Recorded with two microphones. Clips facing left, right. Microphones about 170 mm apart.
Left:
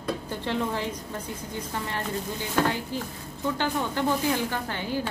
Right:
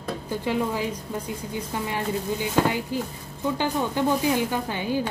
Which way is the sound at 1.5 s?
10° right (ahead or behind).